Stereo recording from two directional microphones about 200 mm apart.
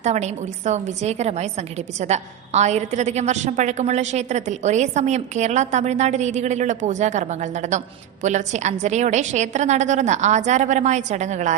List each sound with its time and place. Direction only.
0.0 s a woman's voice: 35° right (ahead or behind)